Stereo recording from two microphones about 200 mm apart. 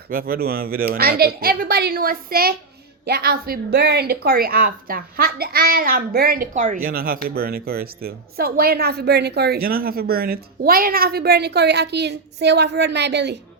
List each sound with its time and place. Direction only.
0.1 s speech: 45° right (ahead or behind)